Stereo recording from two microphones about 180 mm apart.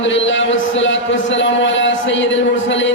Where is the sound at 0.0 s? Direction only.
90° left.